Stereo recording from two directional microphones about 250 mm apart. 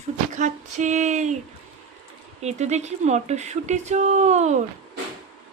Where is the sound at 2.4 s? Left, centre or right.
Right.